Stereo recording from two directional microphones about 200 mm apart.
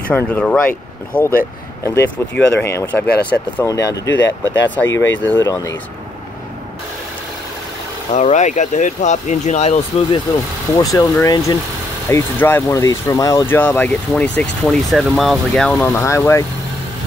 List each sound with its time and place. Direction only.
0.1 s speech: 5° left (ahead or behind)
2.6 s speech: 10° left (ahead or behind)
4.1 s speech: 65° left (ahead or behind)
4.6 s speech: 10° left (ahead or behind)
8.1 s speech: 35° left (ahead or behind)
10.8 s speech: 15° left (ahead or behind)